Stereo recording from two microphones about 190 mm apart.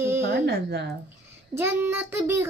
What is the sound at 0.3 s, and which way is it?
Speech, 60° right (ahead or behind).